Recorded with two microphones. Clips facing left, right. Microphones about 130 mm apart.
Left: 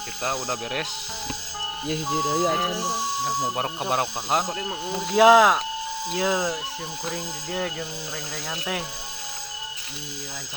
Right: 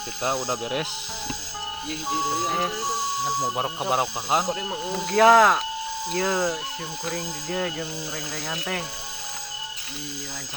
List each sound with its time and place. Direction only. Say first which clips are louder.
0.2 s speech: right 2 dB; 5° right (ahead or behind)
2.1 s speech: left 2 dB; centre (ahead or behind)